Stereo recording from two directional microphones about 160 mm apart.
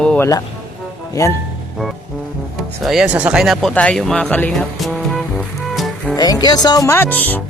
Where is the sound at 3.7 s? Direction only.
5° left (ahead or behind).